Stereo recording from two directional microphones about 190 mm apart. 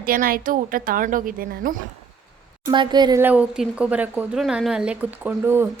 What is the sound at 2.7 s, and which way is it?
Speech, 25° right (ahead or behind).